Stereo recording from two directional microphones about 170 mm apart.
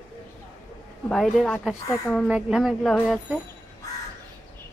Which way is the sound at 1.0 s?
5° left (ahead or behind).